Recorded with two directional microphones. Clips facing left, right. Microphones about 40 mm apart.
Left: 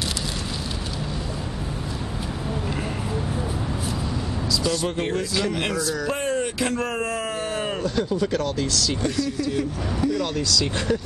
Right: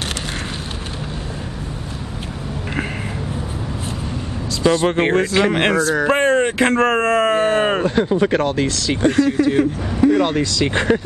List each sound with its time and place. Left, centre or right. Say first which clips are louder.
4.5 s speech: right 9 dB; right